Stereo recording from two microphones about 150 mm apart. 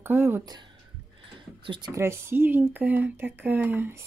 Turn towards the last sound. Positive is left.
turn(degrees=-15)  # may be behind; listen again after turning